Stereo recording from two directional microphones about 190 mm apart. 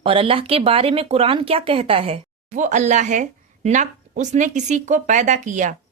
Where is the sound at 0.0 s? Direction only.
30° right (ahead or behind).